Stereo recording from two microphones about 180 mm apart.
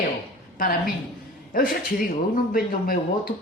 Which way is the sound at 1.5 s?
50° left (ahead or behind).